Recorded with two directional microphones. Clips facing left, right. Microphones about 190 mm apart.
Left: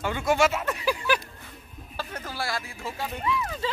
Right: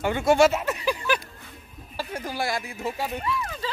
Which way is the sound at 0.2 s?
30° right (ahead or behind).